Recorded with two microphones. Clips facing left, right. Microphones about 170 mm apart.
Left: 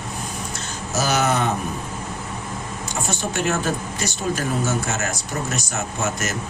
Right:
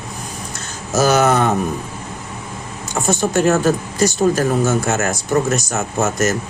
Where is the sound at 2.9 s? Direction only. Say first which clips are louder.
Right 9 dB; 45° right (ahead or behind).